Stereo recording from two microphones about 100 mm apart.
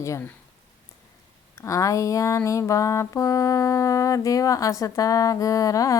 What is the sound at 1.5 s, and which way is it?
Music, 30° left (ahead or behind).